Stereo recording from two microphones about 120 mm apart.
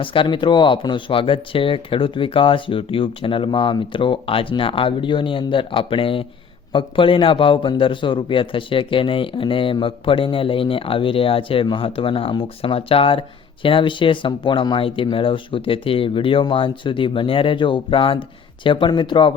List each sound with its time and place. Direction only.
0.0 s speech: 45° left (ahead or behind)